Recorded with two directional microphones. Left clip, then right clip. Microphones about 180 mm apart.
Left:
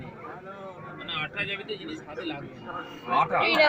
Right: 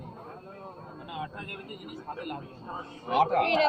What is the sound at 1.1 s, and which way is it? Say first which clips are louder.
Speech: left 7 dB; 55° right (ahead or behind).